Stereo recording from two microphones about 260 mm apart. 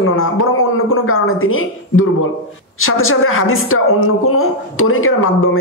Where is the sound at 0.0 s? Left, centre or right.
Left.